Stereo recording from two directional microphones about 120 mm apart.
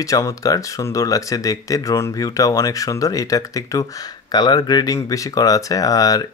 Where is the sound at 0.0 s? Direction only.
25° left (ahead or behind).